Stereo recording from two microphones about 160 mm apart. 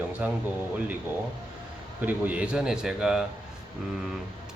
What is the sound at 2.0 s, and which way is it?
A man's voice, 10° right (ahead or behind).